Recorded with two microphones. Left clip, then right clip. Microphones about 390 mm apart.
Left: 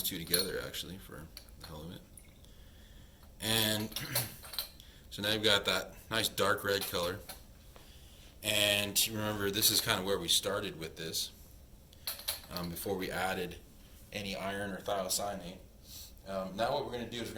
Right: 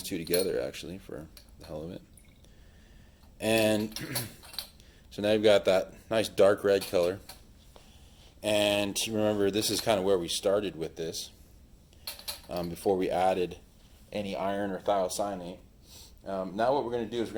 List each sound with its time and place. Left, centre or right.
0.0 s speech: centre
3.3 s speech: centre
5.1 s speech: centre
8.4 s speech: centre
12.2 s mechanisms: centre
14.1 s speech: centre